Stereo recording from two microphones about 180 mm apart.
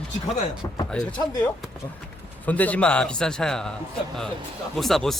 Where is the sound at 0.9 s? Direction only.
5° left (ahead or behind).